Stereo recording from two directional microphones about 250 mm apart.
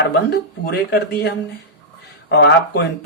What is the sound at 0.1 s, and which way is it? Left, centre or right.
Speech, left.